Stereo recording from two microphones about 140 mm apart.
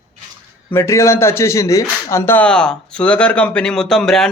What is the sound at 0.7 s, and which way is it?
Speech, 20° left (ahead or behind).